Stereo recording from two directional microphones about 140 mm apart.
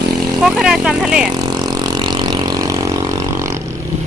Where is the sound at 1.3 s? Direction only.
30° right (ahead or behind).